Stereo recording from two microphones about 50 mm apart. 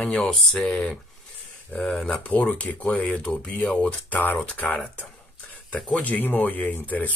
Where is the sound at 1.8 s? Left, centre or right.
Centre.